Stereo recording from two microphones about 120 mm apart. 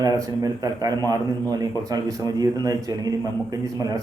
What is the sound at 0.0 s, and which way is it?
A man's voice, 30° right (ahead or behind).